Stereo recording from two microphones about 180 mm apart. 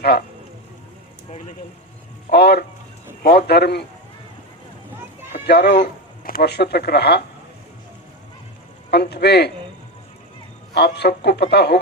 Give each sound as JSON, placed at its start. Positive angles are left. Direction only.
{"t": 0.0, "sound": "speech", "side_deg": 65}
{"t": 2.3, "sound": "speech", "side_deg": 65}
{"t": 5.3, "sound": "speech", "side_deg": 65}
{"t": 5.8, "sound": "speech", "side_deg": 55}
{"t": 8.9, "sound": "speech", "side_deg": 65}
{"t": 10.8, "sound": "speech", "side_deg": 65}